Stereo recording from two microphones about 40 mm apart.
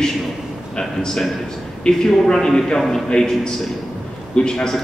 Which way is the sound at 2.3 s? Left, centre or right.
Centre.